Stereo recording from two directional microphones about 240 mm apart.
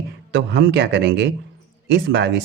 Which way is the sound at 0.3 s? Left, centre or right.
Right.